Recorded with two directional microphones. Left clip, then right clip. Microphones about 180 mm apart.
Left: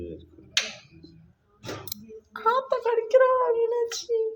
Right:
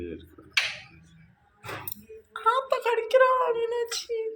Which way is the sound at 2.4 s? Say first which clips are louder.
Even; 35° left (ahead or behind).